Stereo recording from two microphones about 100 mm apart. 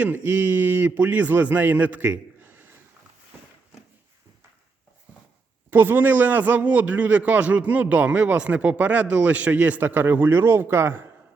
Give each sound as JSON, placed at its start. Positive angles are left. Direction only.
{"t": 0.0, "sound": "a man's voice", "side_deg": -15}
{"t": 5.7, "sound": "a man's voice", "side_deg": -20}